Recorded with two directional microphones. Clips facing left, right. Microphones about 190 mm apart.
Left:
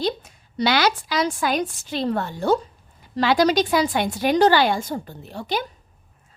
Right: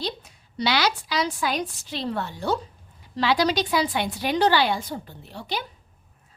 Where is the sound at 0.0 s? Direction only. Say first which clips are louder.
Left 7 dB; 50° left (ahead or behind).